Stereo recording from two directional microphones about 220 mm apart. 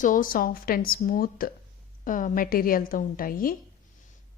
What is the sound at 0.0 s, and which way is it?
A woman's voice, 40° left (ahead or behind).